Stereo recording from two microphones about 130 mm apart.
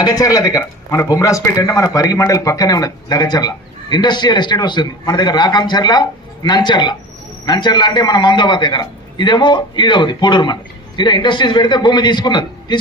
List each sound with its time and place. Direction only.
0.0 s a man's voice: 30° left (ahead or behind)